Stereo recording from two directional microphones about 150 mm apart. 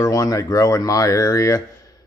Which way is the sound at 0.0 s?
25° left (ahead or behind).